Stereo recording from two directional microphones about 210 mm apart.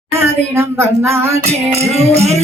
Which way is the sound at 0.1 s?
10° right (ahead or behind).